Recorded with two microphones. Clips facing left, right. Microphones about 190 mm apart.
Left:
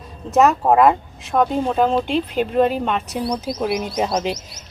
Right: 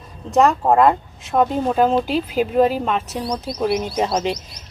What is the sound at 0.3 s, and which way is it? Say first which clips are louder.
Speech: even; centre (ahead or behind).